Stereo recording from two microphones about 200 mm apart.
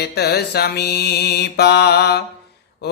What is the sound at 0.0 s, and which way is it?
Mantra, 55° left (ahead or behind).